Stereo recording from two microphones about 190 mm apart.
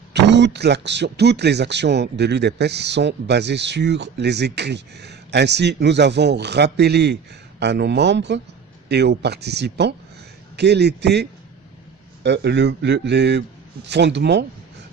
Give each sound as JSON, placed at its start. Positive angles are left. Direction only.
{"t": 0.1, "sound": "speech", "side_deg": -65}